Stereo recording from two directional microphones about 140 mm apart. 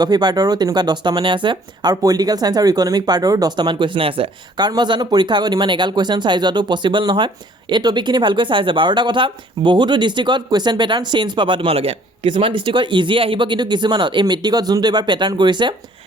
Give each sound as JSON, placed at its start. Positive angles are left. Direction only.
{"t": 0.0, "sound": "speech", "side_deg": -30}